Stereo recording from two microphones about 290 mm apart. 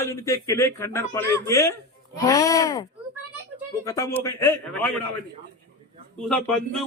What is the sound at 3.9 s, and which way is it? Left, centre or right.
A man's voice, centre.